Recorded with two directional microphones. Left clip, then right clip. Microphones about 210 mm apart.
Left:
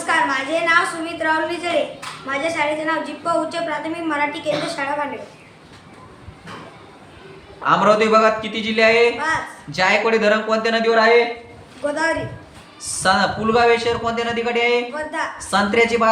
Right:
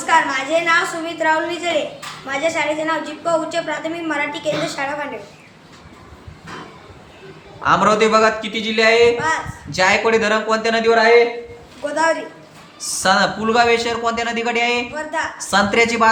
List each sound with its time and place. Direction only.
0.0 s a woman's voice: centre (ahead or behind)
7.6 s a man's voice: 15° right (ahead or behind)
12.8 s a man's voice: 15° right (ahead or behind)
14.9 s a woman's voice: 5° right (ahead or behind)
15.4 s a man's voice: 20° right (ahead or behind)